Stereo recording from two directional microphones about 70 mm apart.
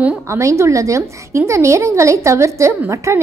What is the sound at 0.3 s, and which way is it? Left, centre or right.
A woman's voice, right.